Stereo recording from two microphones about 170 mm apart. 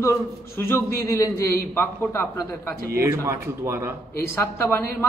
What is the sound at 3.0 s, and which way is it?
Speech, 15° right (ahead or behind).